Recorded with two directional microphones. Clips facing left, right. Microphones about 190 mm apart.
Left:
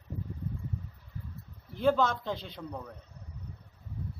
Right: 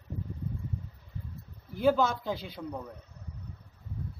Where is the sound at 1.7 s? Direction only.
5° right (ahead or behind).